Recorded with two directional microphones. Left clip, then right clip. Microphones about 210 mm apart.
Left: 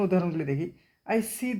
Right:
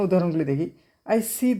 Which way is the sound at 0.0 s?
50° right (ahead or behind).